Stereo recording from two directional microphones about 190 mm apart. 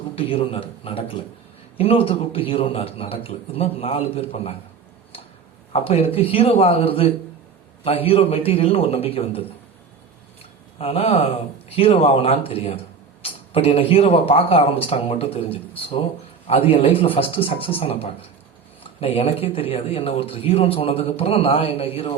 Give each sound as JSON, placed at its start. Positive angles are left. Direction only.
{"t": 0.2, "sound": "a man's voice", "side_deg": 30}
{"t": 5.7, "sound": "a man's voice", "side_deg": 30}
{"t": 10.8, "sound": "a man's voice", "side_deg": 30}